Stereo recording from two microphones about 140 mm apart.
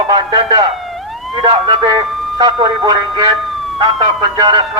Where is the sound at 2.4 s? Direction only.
30° right (ahead or behind).